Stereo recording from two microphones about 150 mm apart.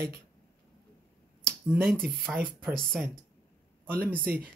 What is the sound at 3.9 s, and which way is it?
Speech, 85° right.